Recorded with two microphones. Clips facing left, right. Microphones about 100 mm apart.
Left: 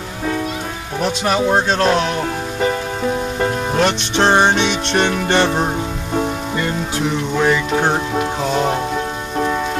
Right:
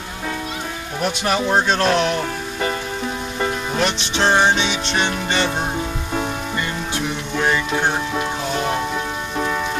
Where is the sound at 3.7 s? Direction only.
50° left (ahead or behind).